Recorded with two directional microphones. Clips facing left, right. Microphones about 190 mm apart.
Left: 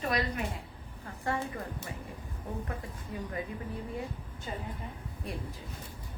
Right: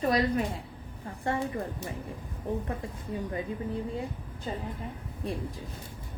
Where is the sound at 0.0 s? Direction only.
30° right (ahead or behind).